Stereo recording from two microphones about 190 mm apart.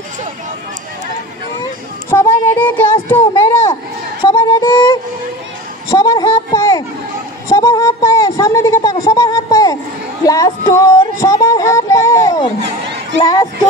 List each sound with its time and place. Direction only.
2.0 s speech: 10° left (ahead or behind)
4.2 s music: 20° left (ahead or behind)
5.9 s a sound: 20° left (ahead or behind)
10.2 s child singing: 20° left (ahead or behind)
13.2 s children playing: 20° left (ahead or behind)